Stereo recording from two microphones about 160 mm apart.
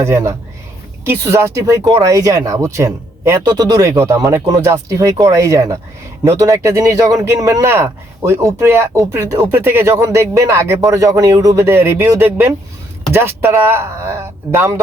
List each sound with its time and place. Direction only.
0.0 s speech: 15° right (ahead or behind)